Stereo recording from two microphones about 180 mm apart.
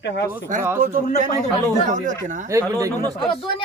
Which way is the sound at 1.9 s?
45° right (ahead or behind).